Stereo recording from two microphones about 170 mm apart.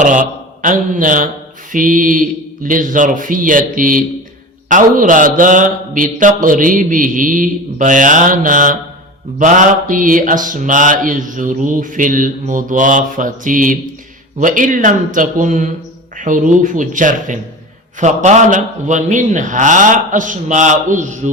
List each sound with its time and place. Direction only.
0.0 s mantra: 50° right (ahead or behind)